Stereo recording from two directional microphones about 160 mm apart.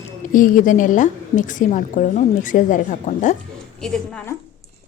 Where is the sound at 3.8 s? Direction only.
Centre (ahead or behind).